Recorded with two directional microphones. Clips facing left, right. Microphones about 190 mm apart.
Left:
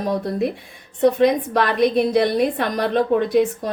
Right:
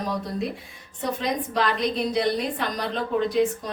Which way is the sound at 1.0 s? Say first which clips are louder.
Left 11 dB; 60° left (ahead or behind).